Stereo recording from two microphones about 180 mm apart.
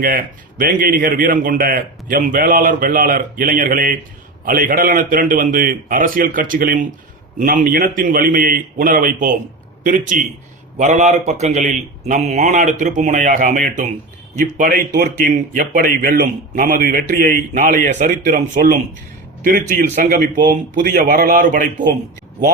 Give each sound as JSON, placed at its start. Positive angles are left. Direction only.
{"t": 0.0, "sound": "a man's voice", "side_deg": -50}